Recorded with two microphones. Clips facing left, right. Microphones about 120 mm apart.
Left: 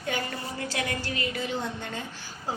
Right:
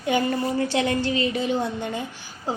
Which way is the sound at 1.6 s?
15° right (ahead or behind).